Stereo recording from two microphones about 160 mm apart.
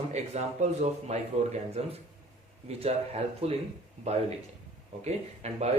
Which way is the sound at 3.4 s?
40° right (ahead or behind).